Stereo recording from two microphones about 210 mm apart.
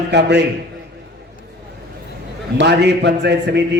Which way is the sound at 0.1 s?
55° right (ahead or behind).